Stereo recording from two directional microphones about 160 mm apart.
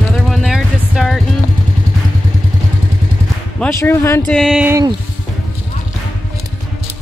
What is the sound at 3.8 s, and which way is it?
Speech, 15° left (ahead or behind).